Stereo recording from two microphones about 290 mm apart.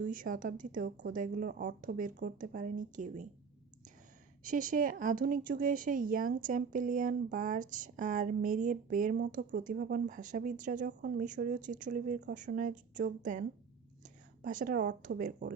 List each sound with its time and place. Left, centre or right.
0.0 s speech: right
4.4 s speech: right
14.4 s speech: right